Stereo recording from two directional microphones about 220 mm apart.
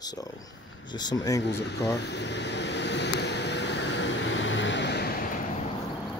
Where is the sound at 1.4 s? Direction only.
50° left (ahead or behind).